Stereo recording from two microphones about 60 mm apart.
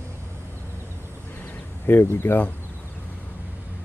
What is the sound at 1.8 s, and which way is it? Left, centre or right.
Speech, left.